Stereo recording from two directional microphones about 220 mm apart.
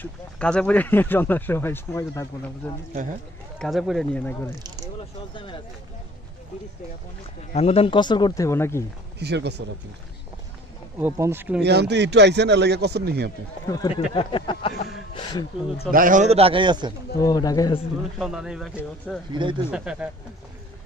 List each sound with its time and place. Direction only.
0.0 s speech: 5° left (ahead or behind)
3.5 s speech: centre (ahead or behind)
5.3 s speech: 20° left (ahead or behind)
7.5 s speech: 25° left (ahead or behind); by 8.8 s 10° left (ahead or behind)
9.2 s speech: 50° right (ahead or behind)
11.0 s speech: 10° right (ahead or behind)
11.6 s speech: 50° right (ahead or behind)
13.7 s speech: 15° left (ahead or behind)
15.9 s speech: 35° right (ahead or behind); by 16.9 s 20° right (ahead or behind)
17.2 s speech: 15° left (ahead or behind)
18.2 s speech: 5° right (ahead or behind)
19.3 s speech: 20° right (ahead or behind)
19.7 s speech: 5° right (ahead or behind)